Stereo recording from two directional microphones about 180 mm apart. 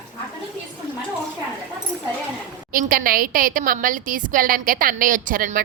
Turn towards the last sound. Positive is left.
turn(degrees=-50)  # may be behind; listen again after turning